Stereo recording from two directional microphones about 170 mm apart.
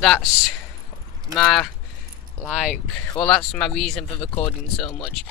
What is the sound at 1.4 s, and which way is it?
Speech, 5° left (ahead or behind).